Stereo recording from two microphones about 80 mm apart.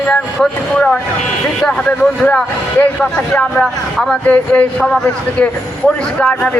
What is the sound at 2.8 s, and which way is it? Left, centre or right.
Speech, centre.